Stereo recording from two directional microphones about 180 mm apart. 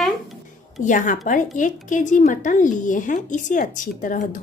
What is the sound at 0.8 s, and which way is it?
A woman's voice, 45° left (ahead or behind).